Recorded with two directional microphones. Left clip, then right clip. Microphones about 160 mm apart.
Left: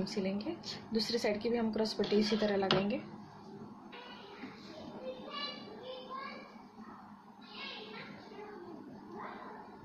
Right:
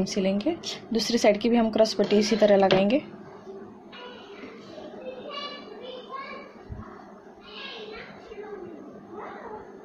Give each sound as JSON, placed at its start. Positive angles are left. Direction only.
{"t": 0.0, "sound": "a woman's voice", "side_deg": -60}